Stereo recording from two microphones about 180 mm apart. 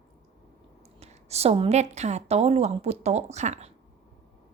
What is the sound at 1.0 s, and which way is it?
A woman's voice, 35° right (ahead or behind).